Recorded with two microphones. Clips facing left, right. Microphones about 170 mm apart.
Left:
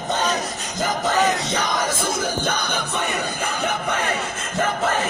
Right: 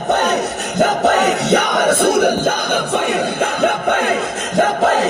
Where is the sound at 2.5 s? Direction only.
55° right (ahead or behind); by 5.0 s 75° right (ahead or behind).